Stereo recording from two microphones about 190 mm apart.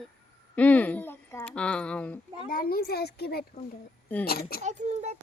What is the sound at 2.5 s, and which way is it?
Speech, 50° left (ahead or behind).